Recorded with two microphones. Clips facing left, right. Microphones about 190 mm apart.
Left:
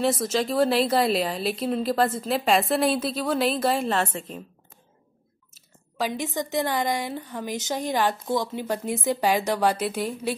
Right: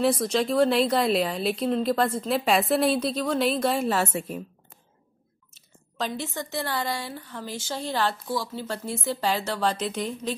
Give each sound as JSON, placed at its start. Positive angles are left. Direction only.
{"t": 0.0, "sound": "a woman's voice", "side_deg": 0}
{"t": 5.9, "sound": "a woman's voice", "side_deg": 15}